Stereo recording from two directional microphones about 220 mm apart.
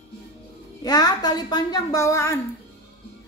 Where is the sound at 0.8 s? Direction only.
15° left (ahead or behind).